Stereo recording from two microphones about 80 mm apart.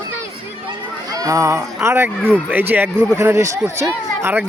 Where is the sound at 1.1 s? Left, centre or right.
Right.